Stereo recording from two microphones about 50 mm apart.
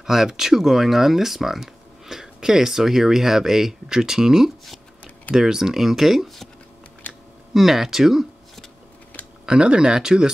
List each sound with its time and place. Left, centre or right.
0.0 s speech: centre
7.5 s speech: centre
9.5 s speech: centre